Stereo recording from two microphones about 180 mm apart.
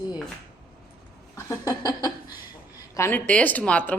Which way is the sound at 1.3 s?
20° left (ahead or behind).